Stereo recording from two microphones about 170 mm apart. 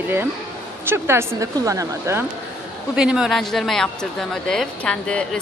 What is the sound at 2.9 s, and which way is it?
Speech, 5° right (ahead or behind).